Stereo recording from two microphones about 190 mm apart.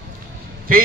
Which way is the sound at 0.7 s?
50° right (ahead or behind).